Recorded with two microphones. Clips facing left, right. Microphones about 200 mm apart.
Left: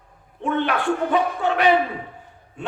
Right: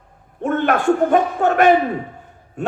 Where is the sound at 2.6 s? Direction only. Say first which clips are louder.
Right 8 dB; 45° right (ahead or behind).